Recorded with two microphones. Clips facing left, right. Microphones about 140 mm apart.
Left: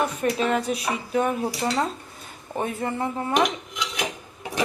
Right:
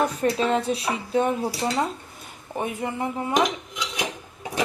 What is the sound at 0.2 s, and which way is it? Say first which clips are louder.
Speech: right 1 dB; 30° right (ahead or behind).